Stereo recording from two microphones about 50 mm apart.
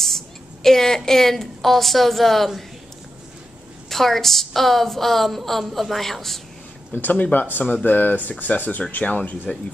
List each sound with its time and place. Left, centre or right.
0.0 s a woman's voice: centre
3.9 s a woman's voice: centre
6.9 s speech: left